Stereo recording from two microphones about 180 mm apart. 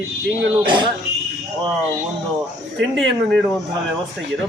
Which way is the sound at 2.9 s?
5° left (ahead or behind).